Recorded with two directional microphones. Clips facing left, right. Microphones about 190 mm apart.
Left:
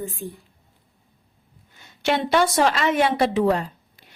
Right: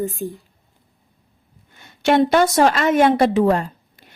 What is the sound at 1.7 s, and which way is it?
A woman's voice, 55° right (ahead or behind).